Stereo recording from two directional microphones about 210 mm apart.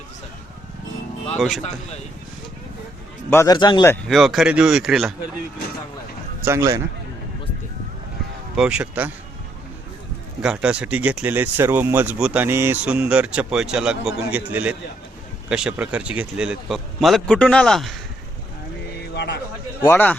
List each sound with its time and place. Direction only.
1.4 s speech: centre (ahead or behind)
3.2 s a man's voice: 15° left (ahead or behind)
4.1 s speech: centre (ahead or behind)
6.4 s speech: 15° right (ahead or behind)
8.5 s speech: 5° right (ahead or behind)
10.4 s speech: 5° right (ahead or behind)
19.1 s a sound: 55° left (ahead or behind)
19.8 s a man's voice: 10° left (ahead or behind)